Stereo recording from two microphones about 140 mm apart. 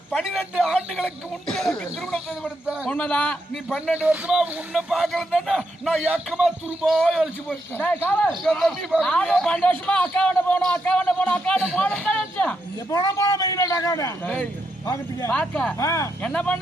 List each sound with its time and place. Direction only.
0.1 s speech: 5° right (ahead or behind)
3.7 s speech: 5° right (ahead or behind)
7.8 s a man's voice: 15° left (ahead or behind)
8.4 s a man's voice: centre (ahead or behind)
12.9 s a man's voice: 25° left (ahead or behind)
15.3 s a man's voice: 5° left (ahead or behind)
15.8 s a man's voice: 20° left (ahead or behind)
16.2 s a man's voice: 10° left (ahead or behind)